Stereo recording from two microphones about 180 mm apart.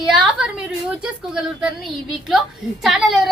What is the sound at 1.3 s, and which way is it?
A woman's voice, 5° right (ahead or behind).